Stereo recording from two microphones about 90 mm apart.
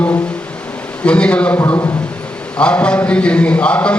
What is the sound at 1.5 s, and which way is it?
Speech, 30° left (ahead or behind).